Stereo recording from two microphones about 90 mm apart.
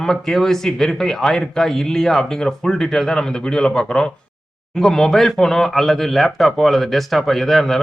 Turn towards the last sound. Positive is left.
turn(degrees=0)  # may be behind; listen again after turning